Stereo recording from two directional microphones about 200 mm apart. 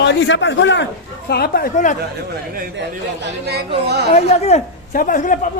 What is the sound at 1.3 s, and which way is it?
Speech, 50° left (ahead or behind).